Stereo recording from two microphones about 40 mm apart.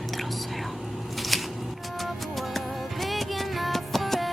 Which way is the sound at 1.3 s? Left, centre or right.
Centre.